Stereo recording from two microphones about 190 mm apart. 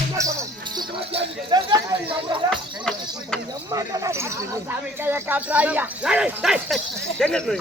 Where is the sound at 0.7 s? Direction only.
30° right (ahead or behind).